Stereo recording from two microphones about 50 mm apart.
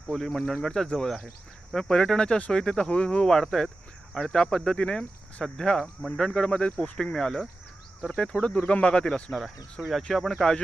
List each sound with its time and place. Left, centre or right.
0.1 s speech: centre; by 3.2 s left
3.2 s speech: centre
10.1 s speech: centre